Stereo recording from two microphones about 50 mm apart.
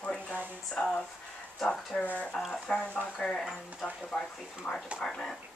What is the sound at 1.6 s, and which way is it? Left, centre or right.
Speech, centre.